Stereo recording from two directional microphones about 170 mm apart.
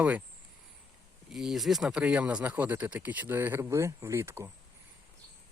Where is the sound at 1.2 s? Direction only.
Centre (ahead or behind).